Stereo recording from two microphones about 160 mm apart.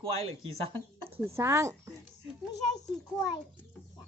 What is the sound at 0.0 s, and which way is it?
Speech, 35° right (ahead or behind).